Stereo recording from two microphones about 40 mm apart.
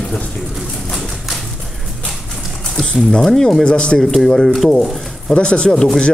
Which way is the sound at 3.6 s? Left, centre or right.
Left.